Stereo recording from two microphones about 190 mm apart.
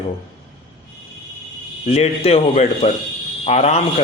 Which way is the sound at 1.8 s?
35° left (ahead or behind).